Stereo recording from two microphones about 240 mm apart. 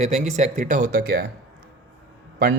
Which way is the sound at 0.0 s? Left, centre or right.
Right.